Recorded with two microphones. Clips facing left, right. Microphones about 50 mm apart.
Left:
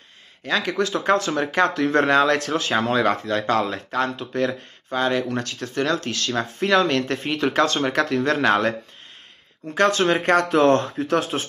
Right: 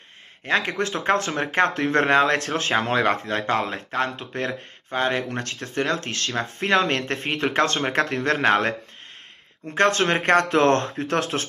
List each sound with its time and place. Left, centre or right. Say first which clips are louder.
0.5 s speech: left 1 dB; right
3.2 s speech: left 2 dB; right
9.8 s speech: left 1 dB; right